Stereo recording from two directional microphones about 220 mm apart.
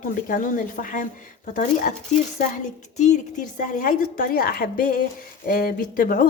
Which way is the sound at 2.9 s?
30° left (ahead or behind).